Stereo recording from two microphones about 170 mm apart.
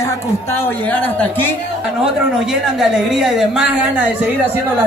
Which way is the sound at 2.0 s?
5° right (ahead or behind).